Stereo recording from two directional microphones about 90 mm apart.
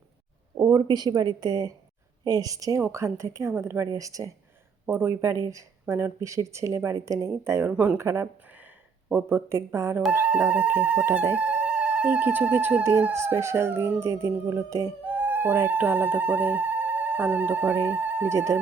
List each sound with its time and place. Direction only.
0.7 s speech: 50° right (ahead or behind)
4.9 s speech: 25° right (ahead or behind)
7.7 s speech: 15° right (ahead or behind)
7.9 s speech: 30° right (ahead or behind)
10.1 s speech: 15° right (ahead or behind); by 14.9 s 35° right (ahead or behind)
15.0 s speech: 20° right (ahead or behind)